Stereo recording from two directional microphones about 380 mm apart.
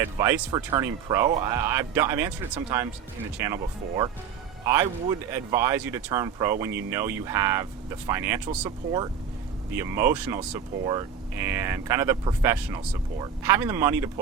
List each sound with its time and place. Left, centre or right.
0.0 s speech: centre